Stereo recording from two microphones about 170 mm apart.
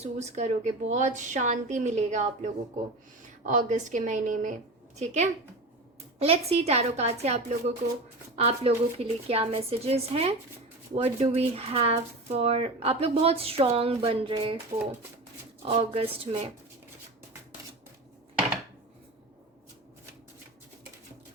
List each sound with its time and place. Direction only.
0.0 s a woman's voice: 40° right (ahead or behind)
15.6 s speech: 35° right (ahead or behind)